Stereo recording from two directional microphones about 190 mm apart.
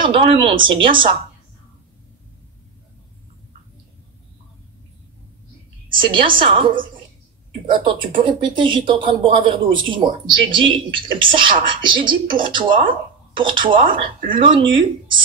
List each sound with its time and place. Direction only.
0.0 s speech: 30° right (ahead or behind)
5.9 s speech: 25° right (ahead or behind)
7.8 s speech: 25° right (ahead or behind)